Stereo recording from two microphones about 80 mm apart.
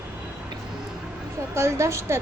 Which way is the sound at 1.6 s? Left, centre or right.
Right.